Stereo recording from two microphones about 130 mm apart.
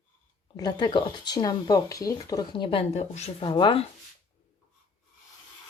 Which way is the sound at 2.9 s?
55° left (ahead or behind).